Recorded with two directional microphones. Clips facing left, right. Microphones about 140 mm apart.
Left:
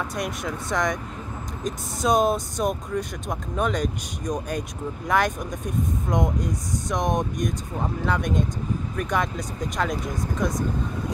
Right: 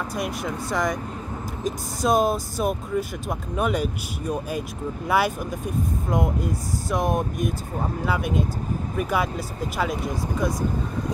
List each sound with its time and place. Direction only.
0.1 s speech: centre (ahead or behind)